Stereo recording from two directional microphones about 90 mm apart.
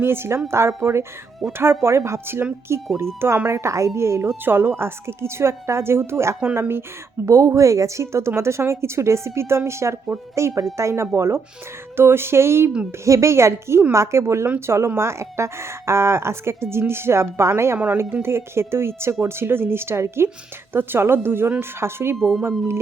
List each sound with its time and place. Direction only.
0.0 s speech: 25° right (ahead or behind)
7.3 s speech: 35° right (ahead or behind)
22.2 s speech: centre (ahead or behind)